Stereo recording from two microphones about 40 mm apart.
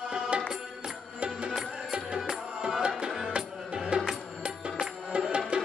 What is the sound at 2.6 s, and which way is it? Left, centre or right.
Music, right.